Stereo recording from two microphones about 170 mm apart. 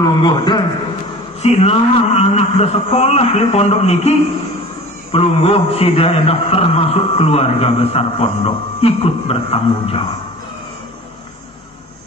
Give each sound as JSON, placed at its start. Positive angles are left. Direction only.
{"t": 0.0, "sound": "a man's voice", "side_deg": 25}
{"t": 1.4, "sound": "a man's voice", "side_deg": 40}